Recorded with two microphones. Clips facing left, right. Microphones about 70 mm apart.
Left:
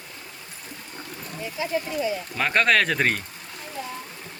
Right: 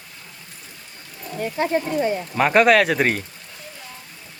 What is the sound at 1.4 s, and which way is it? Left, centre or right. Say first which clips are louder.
Speech: right 6 dB; right.